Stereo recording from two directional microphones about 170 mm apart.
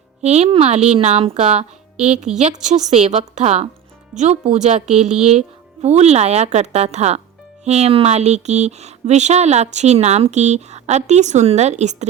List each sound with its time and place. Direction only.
0.2 s speech: 40° right (ahead or behind)